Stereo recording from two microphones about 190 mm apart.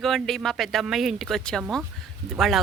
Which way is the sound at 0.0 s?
Centre (ahead or behind).